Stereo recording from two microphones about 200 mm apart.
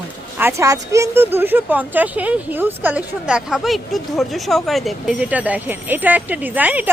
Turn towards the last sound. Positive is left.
turn(degrees=-10)  # may be behind; listen again after turning